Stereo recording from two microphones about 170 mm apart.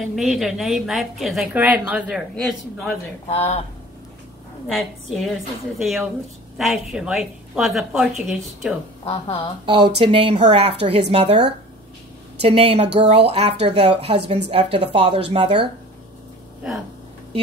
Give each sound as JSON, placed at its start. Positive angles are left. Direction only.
{"t": 0.1, "sound": "a woman's voice", "side_deg": 0}
{"t": 3.3, "sound": "a woman's voice", "side_deg": 40}
{"t": 4.6, "sound": "a woman's voice", "side_deg": 0}
{"t": 9.0, "sound": "a woman's voice", "side_deg": 35}
{"t": 9.7, "sound": "speech", "side_deg": -30}